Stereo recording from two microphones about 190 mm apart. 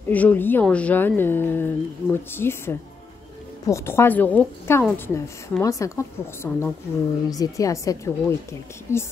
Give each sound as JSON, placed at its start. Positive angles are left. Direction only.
{"t": 0.1, "sound": "a woman's voice", "side_deg": 10}